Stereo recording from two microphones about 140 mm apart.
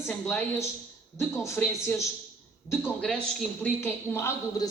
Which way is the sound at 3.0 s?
5° left (ahead or behind).